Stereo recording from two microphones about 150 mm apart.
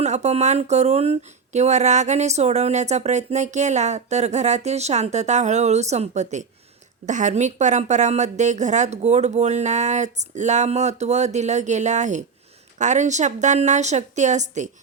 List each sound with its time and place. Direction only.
0.0 s speech: 45° right (ahead or behind)